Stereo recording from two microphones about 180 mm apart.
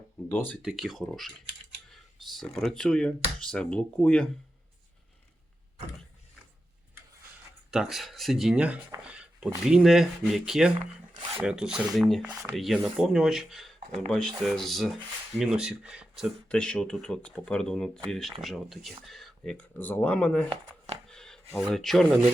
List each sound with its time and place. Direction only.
0.3 s speech: 10° left (ahead or behind)
0.6 s speech: 5° right (ahead or behind)
7.7 s speech: centre (ahead or behind)
9.0 s a sound: 5° right (ahead or behind)
9.6 s speech: 5° right (ahead or behind)
12.3 s speech: 15° right (ahead or behind)
12.5 s speech: centre (ahead or behind)
20.5 s speech: 35° right (ahead or behind)
21.1 s a sound: 5° left (ahead or behind)
21.7 s speech: centre (ahead or behind)